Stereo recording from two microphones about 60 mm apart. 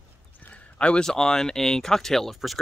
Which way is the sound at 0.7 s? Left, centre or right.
Centre.